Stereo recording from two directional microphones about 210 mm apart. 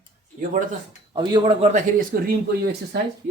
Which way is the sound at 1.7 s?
45° right (ahead or behind).